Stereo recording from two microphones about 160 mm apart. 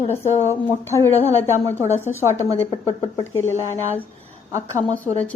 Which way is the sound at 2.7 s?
35° left (ahead or behind).